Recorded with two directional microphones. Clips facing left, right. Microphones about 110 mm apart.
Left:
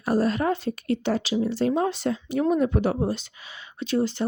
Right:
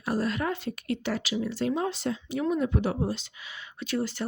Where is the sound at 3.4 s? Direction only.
30° left (ahead or behind).